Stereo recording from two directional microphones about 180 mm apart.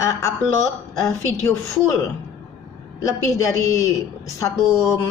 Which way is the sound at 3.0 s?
15° left (ahead or behind).